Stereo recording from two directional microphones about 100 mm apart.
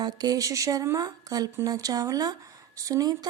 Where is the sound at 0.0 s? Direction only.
40° right (ahead or behind).